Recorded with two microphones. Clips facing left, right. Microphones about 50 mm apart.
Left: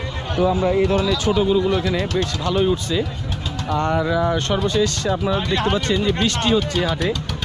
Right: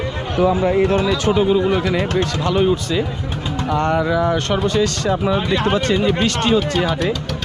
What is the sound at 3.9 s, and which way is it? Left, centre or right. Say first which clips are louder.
Speech: right 1 dB; right.